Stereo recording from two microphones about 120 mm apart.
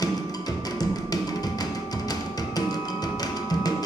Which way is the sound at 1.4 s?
35° left (ahead or behind).